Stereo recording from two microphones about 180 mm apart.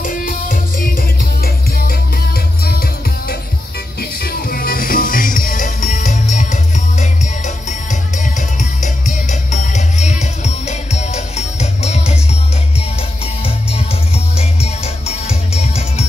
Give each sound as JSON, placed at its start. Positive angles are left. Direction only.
{"t": 0.0, "sound": "music", "side_deg": 50}